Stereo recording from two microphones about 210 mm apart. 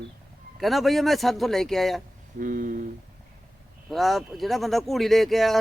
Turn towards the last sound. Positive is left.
turn(degrees=0)  # may be behind; listen again after turning